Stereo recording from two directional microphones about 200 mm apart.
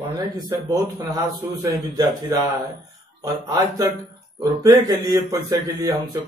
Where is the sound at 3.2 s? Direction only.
20° right (ahead or behind).